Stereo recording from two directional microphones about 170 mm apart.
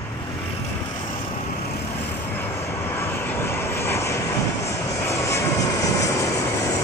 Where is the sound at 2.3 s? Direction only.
15° left (ahead or behind).